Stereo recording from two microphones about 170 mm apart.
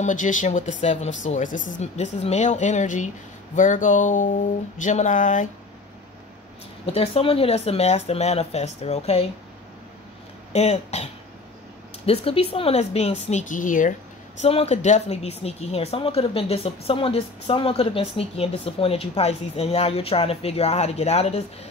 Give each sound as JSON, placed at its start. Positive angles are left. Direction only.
{"t": 0.0, "sound": "speech", "side_deg": 50}
{"t": 6.9, "sound": "speech", "side_deg": 35}
{"t": 10.5, "sound": "speech", "side_deg": 40}
{"t": 12.1, "sound": "speech", "side_deg": 35}
{"t": 14.4, "sound": "speech", "side_deg": 40}